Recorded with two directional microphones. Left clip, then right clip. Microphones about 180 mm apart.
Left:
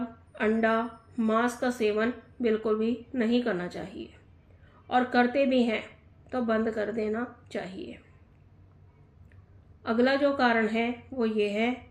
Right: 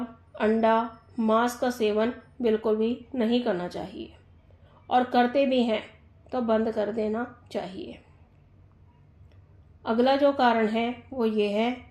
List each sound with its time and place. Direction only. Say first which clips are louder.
0.3 s speech: right 3 dB; 40° right (ahead or behind)
9.8 s speech: right 3 dB; 40° right (ahead or behind)